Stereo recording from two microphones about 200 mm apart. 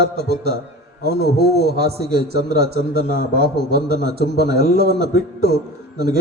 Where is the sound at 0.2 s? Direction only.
55° right (ahead or behind).